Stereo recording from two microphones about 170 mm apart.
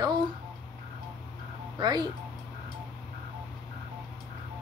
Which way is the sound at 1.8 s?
25° right (ahead or behind).